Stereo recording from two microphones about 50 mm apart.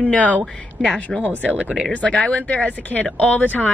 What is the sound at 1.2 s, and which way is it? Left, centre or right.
Speech, left.